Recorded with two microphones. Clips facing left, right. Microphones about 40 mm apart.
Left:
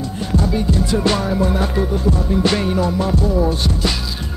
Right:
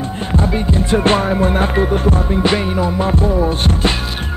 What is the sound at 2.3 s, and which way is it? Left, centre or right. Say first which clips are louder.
Music: right 1 dB; right.